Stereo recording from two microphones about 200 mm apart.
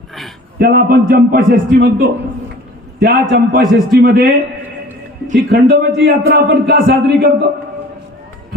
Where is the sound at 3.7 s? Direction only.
45° right (ahead or behind).